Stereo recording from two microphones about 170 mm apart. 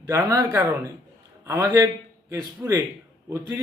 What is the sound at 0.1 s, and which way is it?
A man's voice, 20° right (ahead or behind).